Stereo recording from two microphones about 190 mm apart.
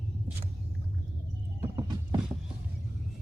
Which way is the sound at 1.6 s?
20° right (ahead or behind).